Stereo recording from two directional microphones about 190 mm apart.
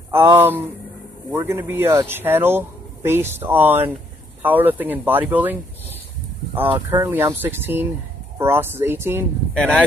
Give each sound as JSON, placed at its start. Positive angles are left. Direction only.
{"t": 0.4, "sound": "speech", "side_deg": -10}
{"t": 9.5, "sound": "speech", "side_deg": 5}